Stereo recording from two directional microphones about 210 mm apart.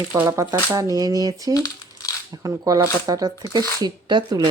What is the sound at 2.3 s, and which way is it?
Speech, 15° right (ahead or behind).